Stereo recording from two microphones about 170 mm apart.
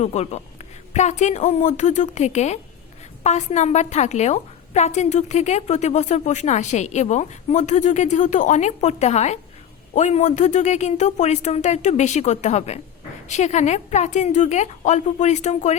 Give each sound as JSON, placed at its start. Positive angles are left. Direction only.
{"t": 0.0, "sound": "a woman's voice", "side_deg": 40}